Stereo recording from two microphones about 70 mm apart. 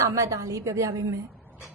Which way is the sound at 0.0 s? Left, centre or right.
Right.